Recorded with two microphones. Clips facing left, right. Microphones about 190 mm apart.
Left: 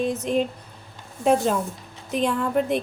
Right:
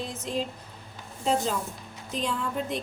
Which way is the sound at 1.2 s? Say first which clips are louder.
Left 7 dB; 60° left (ahead or behind).